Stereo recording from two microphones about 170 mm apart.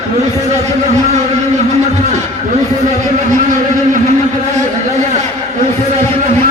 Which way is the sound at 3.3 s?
50° right (ahead or behind).